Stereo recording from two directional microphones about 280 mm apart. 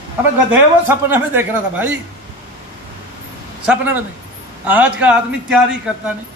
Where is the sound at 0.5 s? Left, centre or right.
Centre.